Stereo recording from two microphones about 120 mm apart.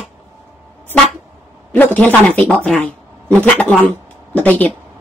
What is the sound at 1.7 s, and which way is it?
Speech, 15° left (ahead or behind).